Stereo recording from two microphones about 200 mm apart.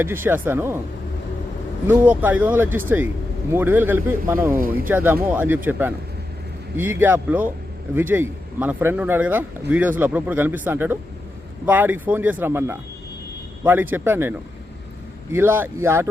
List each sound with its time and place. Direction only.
0.0 s speech: 10° right (ahead or behind)
1.9 s speech: 10° right (ahead or behind)
4.5 s speech: 45° right (ahead or behind)
4.9 s speech: 10° right (ahead or behind)
6.7 s speech: 10° right (ahead or behind)